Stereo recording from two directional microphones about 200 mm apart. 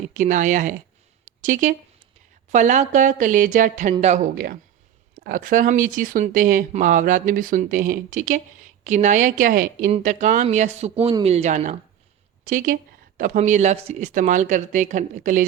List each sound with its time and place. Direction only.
0.1 s speech: 40° right (ahead or behind)
1.2 s a sound: 40° right (ahead or behind)
2.5 s speech: 35° right (ahead or behind)
5.2 s speech: 40° right (ahead or behind)